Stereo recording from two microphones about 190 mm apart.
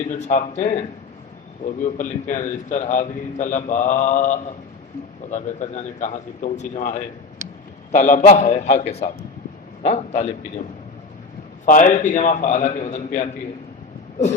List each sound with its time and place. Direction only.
0.1 s a man's voice: 40° left (ahead or behind)
11.6 s a man's voice: 40° left (ahead or behind)